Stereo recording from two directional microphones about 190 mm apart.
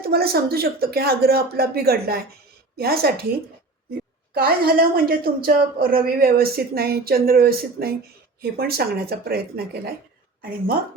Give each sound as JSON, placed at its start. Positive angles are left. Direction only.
{"t": 0.0, "sound": "a woman's voice", "side_deg": -55}
{"t": 4.4, "sound": "a woman's voice", "side_deg": -50}